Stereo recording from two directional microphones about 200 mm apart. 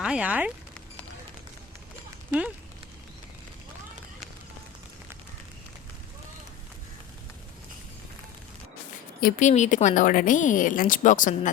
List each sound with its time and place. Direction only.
0.0 s speech: 5° right (ahead or behind)
9.2 s a woman's voice: 35° left (ahead or behind)